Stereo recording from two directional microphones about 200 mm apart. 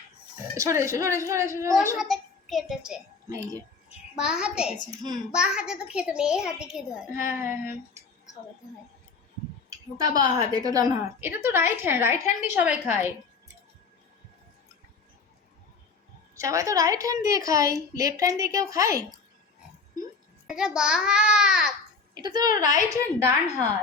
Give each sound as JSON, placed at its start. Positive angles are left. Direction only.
{"t": 0.5, "sound": "a woman's voice", "side_deg": -15}
{"t": 2.0, "sound": "a child's voice", "side_deg": 0}
{"t": 3.2, "sound": "a woman's voice", "side_deg": -15}
{"t": 3.8, "sound": "a child's voice", "side_deg": -5}
{"t": 4.9, "sound": "a woman's voice", "side_deg": -20}
{"t": 5.3, "sound": "a child's voice", "side_deg": -5}
{"t": 10.0, "sound": "a woman's voice", "side_deg": -20}
{"t": 16.3, "sound": "a woman's voice", "side_deg": -15}
{"t": 20.5, "sound": "a child's voice", "side_deg": 0}
{"t": 22.1, "sound": "a woman's voice", "side_deg": -20}